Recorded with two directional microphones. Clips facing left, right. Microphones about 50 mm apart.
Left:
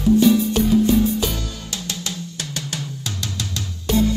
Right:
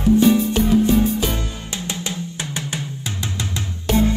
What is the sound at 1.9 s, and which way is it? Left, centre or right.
Music, right.